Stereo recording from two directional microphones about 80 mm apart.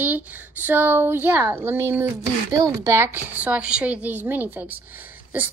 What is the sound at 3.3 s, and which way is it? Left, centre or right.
A woman's voice, centre.